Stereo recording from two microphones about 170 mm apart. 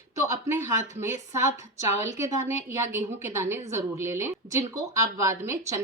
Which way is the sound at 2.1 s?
15° right (ahead or behind).